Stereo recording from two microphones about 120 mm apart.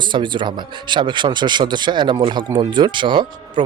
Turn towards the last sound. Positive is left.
turn(degrees=-40)  # may be behind; listen again after turning